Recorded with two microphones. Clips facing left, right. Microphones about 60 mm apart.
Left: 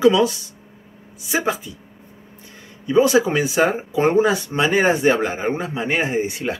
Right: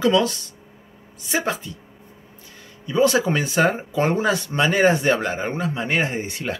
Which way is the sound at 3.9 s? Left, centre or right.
Centre.